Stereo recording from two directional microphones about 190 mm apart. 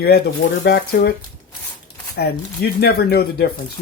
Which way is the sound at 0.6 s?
55° left (ahead or behind).